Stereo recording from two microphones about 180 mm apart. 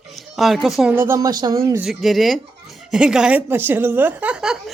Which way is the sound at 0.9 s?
15° right (ahead or behind).